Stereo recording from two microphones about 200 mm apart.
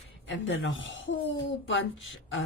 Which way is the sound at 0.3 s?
70° left (ahead or behind).